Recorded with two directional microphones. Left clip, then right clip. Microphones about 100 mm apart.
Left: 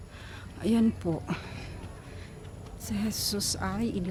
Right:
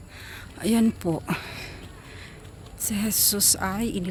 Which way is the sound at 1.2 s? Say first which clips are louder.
Right 7 dB; 60° right (ahead or behind).